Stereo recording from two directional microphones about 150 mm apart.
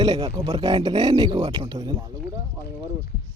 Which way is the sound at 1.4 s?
40° right (ahead or behind).